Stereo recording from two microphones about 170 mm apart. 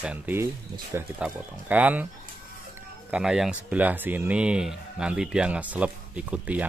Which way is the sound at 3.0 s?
5° right (ahead or behind).